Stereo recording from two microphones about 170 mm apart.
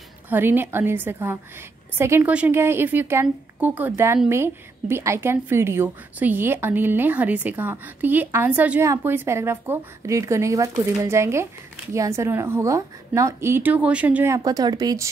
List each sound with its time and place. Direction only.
0.3 s a woman's voice: 10° right (ahead or behind)